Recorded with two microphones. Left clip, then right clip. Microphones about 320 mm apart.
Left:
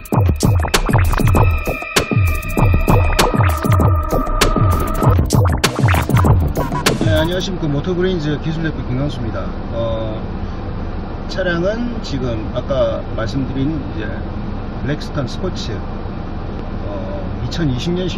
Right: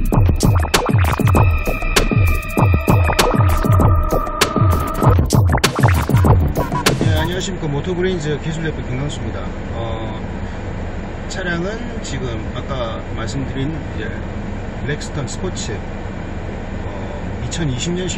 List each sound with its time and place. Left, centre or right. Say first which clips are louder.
0.1 s music: left 1 dB; centre
8.0 s speech: even; left
11.4 s speech: left 5 dB; centre